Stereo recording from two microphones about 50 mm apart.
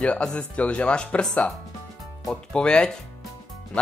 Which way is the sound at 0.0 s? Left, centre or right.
Centre.